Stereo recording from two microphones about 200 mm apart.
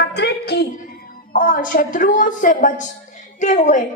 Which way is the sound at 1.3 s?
45° left (ahead or behind).